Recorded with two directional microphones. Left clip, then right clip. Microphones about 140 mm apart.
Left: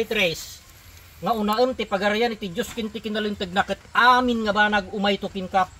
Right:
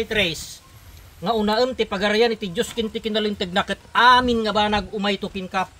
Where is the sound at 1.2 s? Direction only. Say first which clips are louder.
Right 1 dB; 30° right (ahead or behind).